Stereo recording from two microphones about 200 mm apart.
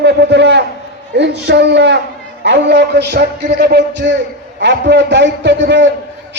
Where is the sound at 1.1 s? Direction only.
55° right (ahead or behind).